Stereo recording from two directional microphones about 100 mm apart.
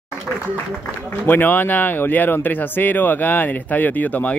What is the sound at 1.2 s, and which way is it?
Speech, 20° left (ahead or behind).